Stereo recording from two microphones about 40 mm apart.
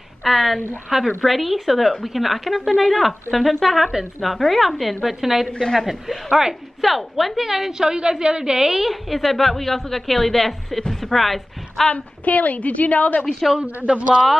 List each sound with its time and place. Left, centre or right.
0.2 s a woman's voice: centre
11.9 s a woman's voice: left
13.6 s a man's voice: right
13.8 s a man's voice: right